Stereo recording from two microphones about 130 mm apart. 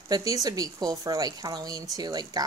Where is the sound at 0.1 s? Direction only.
25° right (ahead or behind).